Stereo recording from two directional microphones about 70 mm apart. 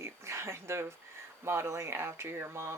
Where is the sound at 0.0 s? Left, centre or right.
Right.